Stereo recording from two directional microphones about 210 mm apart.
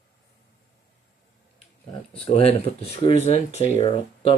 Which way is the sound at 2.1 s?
30° left (ahead or behind).